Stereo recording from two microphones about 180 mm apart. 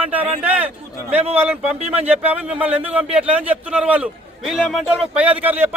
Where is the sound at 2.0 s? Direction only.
10° right (ahead or behind).